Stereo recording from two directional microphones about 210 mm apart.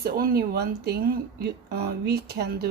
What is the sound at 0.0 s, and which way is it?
Speech, 45° right (ahead or behind).